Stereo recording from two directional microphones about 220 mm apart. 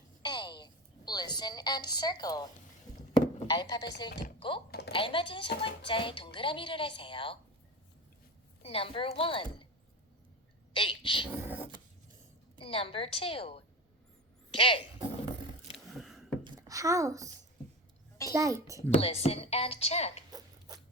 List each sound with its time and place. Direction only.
0.2 s a sound: 20° left (ahead or behind)
3.4 s speech: 15° left (ahead or behind)
4.4 s typing: 25° left (ahead or behind)
4.7 s speech: 45° left (ahead or behind)
4.9 s speech: 25° left (ahead or behind)
8.6 s speech: 25° left (ahead or behind)
10.8 s speech: 25° left (ahead or behind)
11.3 s a sound: 10° right (ahead or behind)
12.5 s a woman's voice: 25° left (ahead or behind)
16.0 s a sound: centre (ahead or behind)
16.4 s a sound: 15° right (ahead or behind)
18.3 s a child's voice: 15° right (ahead or behind)
18.9 s speech: 30° left (ahead or behind)